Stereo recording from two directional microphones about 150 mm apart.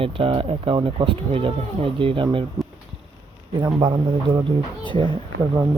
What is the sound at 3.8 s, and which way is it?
Speech, 30° right (ahead or behind).